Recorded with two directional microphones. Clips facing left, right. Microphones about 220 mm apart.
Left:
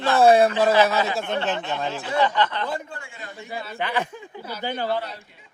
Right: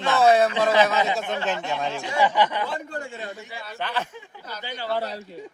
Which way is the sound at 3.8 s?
15° left (ahead or behind).